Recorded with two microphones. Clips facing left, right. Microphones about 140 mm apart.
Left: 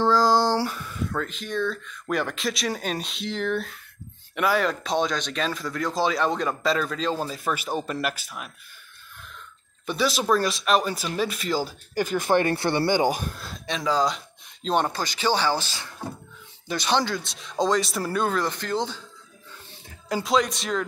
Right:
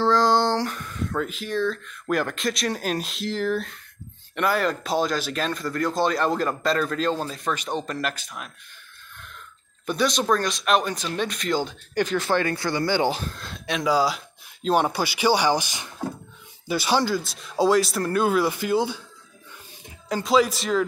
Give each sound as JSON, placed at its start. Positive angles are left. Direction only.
{"t": 0.0, "sound": "a sound", "side_deg": 5}
{"t": 1.1, "sound": "speech", "side_deg": -5}
{"t": 9.8, "sound": "speech", "side_deg": 5}
{"t": 12.2, "sound": "speech", "side_deg": 20}
{"t": 13.0, "sound": "speech", "side_deg": 15}
{"t": 20.1, "sound": "speech", "side_deg": 0}